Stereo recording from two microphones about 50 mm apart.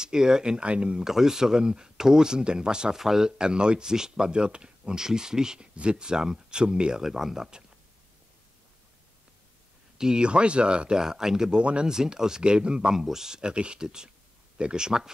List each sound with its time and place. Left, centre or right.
0.0 s speech: centre
1.0 s speech: centre
9.9 s speech: centre